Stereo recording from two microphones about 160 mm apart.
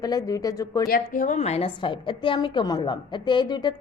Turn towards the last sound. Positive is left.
turn(degrees=30)  # may be behind; listen again after turning